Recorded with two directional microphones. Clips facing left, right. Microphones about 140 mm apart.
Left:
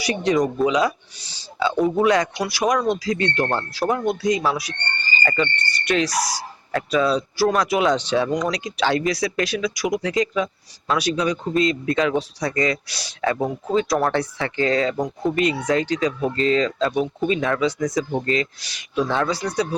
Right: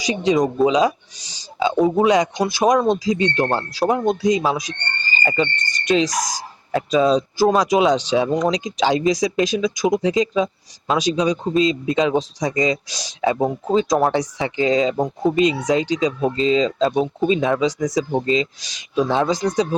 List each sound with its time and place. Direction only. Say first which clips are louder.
0.0 s speech: right 2 dB; 15° right (ahead or behind)
8.3 s speech: right 4 dB; 25° right (ahead or behind)